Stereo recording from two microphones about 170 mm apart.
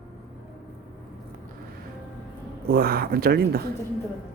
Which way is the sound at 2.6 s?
65° right (ahead or behind).